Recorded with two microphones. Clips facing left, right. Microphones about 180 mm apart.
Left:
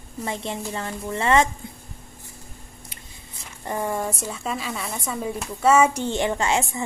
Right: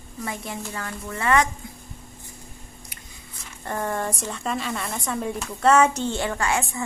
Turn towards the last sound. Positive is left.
turn(degrees=20)  # may be behind; listen again after turning